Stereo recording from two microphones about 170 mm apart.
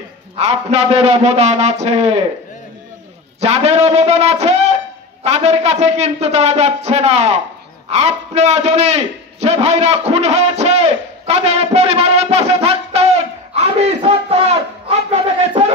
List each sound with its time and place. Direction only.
0.4 s a man's voice: 40° right (ahead or behind)
3.3 s a man's voice: 40° right (ahead or behind)
13.6 s a sound: 35° right (ahead or behind)